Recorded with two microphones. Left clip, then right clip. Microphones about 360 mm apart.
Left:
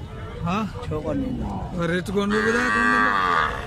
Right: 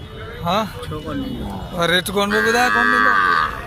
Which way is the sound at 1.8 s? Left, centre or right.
Centre.